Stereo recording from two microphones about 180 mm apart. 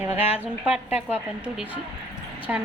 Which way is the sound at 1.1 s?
5° right (ahead or behind).